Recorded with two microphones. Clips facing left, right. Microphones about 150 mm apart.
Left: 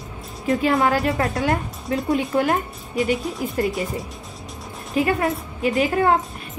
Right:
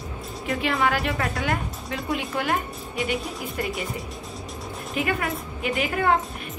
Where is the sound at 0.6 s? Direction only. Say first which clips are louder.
Left 4 dB; 40° left (ahead or behind).